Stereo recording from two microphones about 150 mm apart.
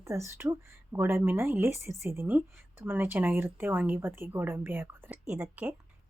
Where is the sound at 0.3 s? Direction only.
15° right (ahead or behind).